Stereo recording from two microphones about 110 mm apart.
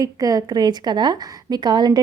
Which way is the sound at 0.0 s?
35° right (ahead or behind).